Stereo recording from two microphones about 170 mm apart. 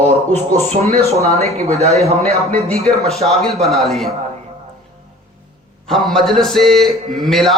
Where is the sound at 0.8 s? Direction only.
40° right (ahead or behind).